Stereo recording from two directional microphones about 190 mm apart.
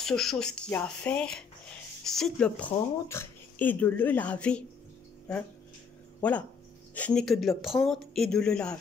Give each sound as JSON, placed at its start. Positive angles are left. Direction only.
{"t": 0.0, "sound": "speech", "side_deg": 0}
{"t": 6.2, "sound": "speech", "side_deg": 5}